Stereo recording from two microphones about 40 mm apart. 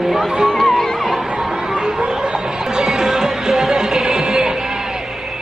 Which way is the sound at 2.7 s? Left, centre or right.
Centre.